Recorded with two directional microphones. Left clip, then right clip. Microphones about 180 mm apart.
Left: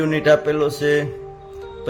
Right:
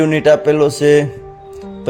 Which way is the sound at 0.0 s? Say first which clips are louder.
Right 5 dB; 30° right (ahead or behind).